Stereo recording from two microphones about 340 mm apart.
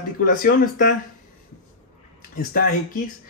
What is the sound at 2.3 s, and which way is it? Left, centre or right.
Speech, left.